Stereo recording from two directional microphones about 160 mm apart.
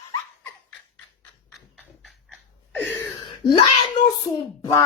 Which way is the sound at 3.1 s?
30° left (ahead or behind).